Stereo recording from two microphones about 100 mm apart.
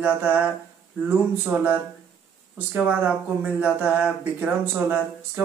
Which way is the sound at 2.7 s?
15° right (ahead or behind).